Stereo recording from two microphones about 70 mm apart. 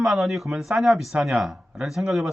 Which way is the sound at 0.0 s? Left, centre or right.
Centre.